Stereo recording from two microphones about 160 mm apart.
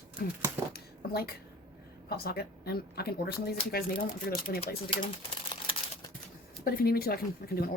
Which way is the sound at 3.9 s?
30° left (ahead or behind).